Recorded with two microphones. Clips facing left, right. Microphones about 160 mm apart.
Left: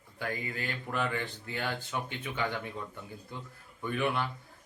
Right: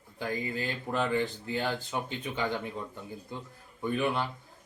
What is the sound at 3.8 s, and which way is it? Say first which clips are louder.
Speech: right 2 dB; 25° right (ahead or behind).